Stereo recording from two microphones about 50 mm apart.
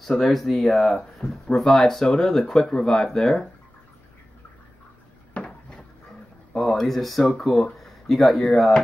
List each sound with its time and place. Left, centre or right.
0.0 s speech: centre
5.3 s cupboard open or close: centre
6.5 s speech: centre